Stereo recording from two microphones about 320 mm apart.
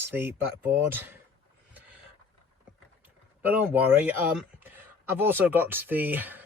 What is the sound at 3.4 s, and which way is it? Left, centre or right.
Speech, centre.